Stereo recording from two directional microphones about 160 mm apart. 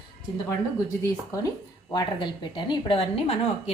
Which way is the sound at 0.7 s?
20° left (ahead or behind).